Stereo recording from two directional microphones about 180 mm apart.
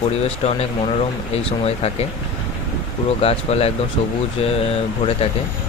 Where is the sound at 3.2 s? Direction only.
35° left (ahead or behind).